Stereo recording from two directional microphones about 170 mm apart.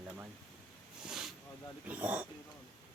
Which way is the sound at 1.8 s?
10° right (ahead or behind).